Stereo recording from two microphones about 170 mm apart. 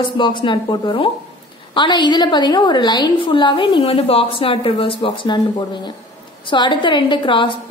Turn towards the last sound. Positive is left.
turn(degrees=30)  # may be behind; listen again after turning